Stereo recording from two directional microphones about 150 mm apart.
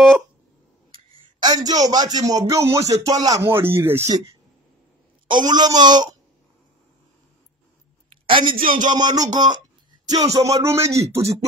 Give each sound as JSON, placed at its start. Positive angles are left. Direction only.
{"t": 0.9, "sound": "speech", "side_deg": -25}
{"t": 8.1, "sound": "a sound", "side_deg": -35}
{"t": 8.5, "sound": "speech", "side_deg": -65}
{"t": 8.9, "sound": "speech", "side_deg": -25}